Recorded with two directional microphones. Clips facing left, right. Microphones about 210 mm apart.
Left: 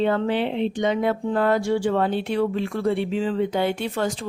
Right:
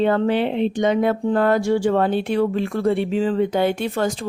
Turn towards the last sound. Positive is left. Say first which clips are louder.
# right 3 dB
turn(degrees=-45)  # may be behind; listen again after turning